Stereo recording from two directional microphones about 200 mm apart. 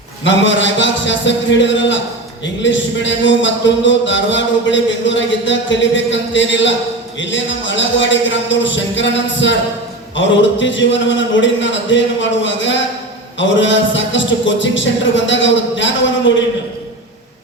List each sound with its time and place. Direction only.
0.3 s a man's voice: 65° left (ahead or behind)